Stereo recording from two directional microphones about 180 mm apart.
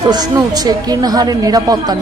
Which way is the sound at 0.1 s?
20° right (ahead or behind).